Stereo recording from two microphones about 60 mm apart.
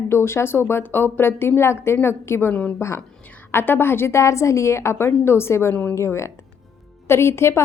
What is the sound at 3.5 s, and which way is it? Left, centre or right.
Speech, left.